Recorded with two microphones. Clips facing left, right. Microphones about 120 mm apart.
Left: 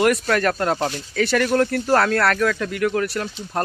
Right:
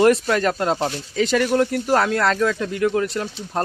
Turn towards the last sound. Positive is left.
turn(degrees=-20)  # may be behind; listen again after turning